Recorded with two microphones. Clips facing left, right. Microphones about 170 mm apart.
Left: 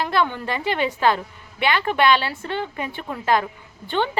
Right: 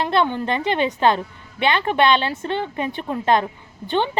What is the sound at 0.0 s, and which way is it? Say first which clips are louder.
A woman's voice: right 2 dB; 25° right (ahead or behind).